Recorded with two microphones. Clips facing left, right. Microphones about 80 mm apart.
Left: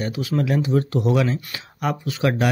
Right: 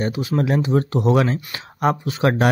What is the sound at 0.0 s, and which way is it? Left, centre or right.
Speech, right.